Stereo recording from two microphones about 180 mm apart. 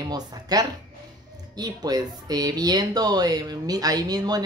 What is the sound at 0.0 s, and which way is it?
Speech, 20° right (ahead or behind).